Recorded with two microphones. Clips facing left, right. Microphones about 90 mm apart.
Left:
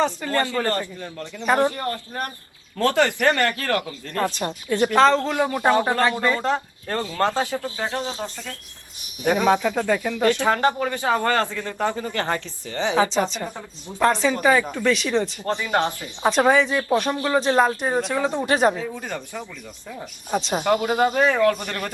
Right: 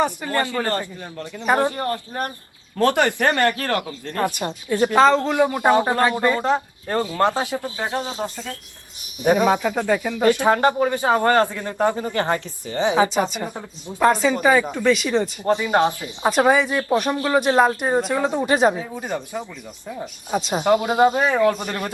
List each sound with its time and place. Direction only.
0.0 s speech: 15° right (ahead or behind)
2.8 s speech: 20° right (ahead or behind)
4.2 s speech: 15° right (ahead or behind)
18.8 s speech: 20° right (ahead or behind)
20.0 s speech: 5° right (ahead or behind)